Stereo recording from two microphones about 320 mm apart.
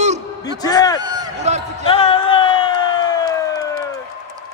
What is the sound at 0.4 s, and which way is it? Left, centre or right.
Speech, centre.